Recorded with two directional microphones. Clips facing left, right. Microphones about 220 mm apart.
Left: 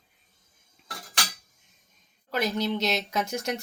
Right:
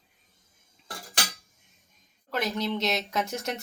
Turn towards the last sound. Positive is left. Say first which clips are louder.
# left 1 dB
turn(degrees=0)  # may be behind; listen again after turning